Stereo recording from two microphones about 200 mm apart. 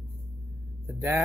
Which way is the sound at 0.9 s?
10° right (ahead or behind).